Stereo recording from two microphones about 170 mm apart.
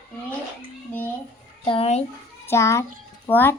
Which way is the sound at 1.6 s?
35° left (ahead or behind).